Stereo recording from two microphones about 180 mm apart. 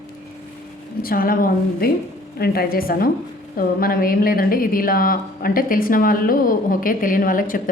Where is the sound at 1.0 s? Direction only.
55° left (ahead or behind).